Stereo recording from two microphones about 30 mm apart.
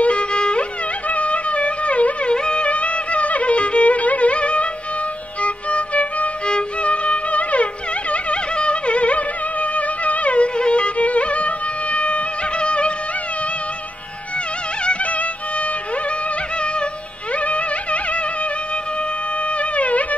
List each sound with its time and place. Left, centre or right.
0.0 s music: left
1.1 s a sound: left
2.3 s music: left
11.1 s music: left
17.5 s carnatic music: left
19.6 s music: left